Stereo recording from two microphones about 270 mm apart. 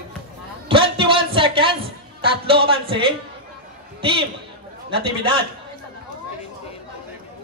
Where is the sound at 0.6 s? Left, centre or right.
Centre.